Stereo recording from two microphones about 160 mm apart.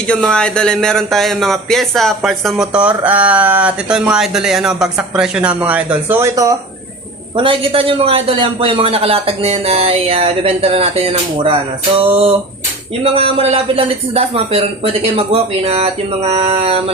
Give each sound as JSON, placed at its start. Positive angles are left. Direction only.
{"t": 0.1, "sound": "speech", "side_deg": 5}
{"t": 7.3, "sound": "a man's voice", "side_deg": -35}